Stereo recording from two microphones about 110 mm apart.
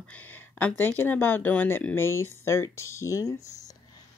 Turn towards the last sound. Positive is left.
turn(degrees=30)  # may be behind; listen again after turning